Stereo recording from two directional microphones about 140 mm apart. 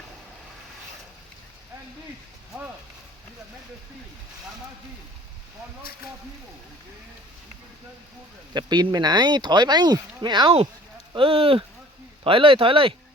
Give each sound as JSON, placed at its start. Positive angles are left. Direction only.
{"t": 8.5, "sound": "speech", "side_deg": -30}